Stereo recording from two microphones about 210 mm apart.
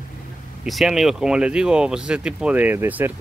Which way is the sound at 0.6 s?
Centre (ahead or behind).